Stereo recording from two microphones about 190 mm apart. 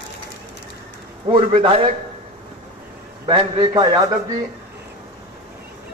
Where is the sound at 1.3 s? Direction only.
30° right (ahead or behind).